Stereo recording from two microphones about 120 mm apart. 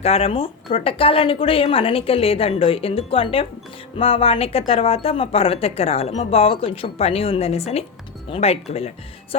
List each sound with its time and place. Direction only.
0.0 s speech: 55° left (ahead or behind)